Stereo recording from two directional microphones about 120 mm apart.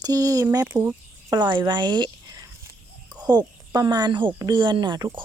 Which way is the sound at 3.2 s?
35° right (ahead or behind).